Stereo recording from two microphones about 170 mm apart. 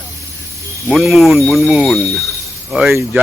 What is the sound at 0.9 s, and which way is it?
A man's voice, centre (ahead or behind).